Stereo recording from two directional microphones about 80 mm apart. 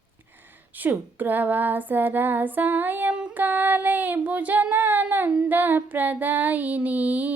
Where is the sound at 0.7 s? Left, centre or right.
Right.